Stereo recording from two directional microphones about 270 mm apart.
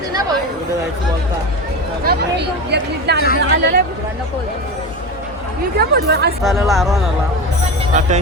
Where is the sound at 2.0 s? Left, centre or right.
Right.